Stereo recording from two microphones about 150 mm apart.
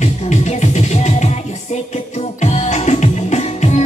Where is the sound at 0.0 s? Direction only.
50° left (ahead or behind).